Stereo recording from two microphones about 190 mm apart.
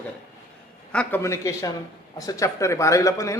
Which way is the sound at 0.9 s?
10° left (ahead or behind).